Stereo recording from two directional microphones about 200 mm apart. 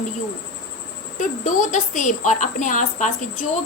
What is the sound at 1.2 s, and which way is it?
A woman's voice, 40° left (ahead or behind).